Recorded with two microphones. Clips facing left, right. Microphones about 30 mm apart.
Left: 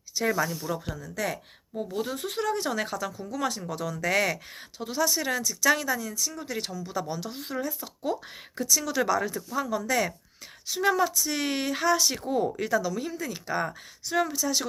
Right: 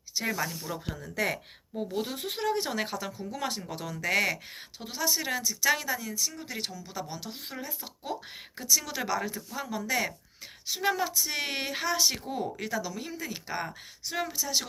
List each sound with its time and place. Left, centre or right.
0.3 s speech: centre
0.9 s speech: right
1.9 s speech: right
12.3 s speech: centre